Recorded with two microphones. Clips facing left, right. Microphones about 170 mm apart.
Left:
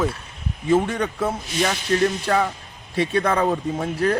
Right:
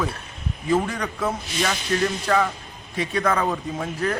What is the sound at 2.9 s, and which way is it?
Speech, 30° left (ahead or behind).